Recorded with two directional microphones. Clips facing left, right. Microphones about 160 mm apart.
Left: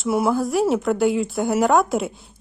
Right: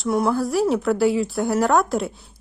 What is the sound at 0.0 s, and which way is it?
Speech, 5° left (ahead or behind).